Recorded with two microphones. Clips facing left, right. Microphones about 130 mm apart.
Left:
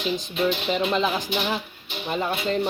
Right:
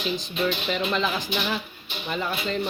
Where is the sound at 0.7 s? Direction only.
35° left (ahead or behind).